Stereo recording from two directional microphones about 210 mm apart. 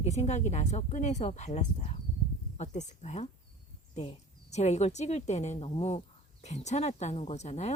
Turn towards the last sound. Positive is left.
turn(degrees=30)  # may be behind; listen again after turning